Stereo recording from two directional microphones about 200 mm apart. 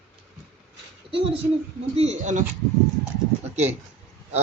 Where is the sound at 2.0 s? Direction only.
35° right (ahead or behind).